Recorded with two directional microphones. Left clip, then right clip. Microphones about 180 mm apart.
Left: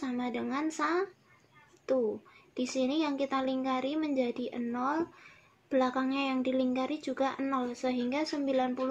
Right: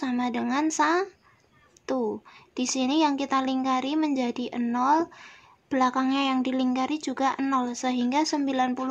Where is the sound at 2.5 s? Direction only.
40° right (ahead or behind).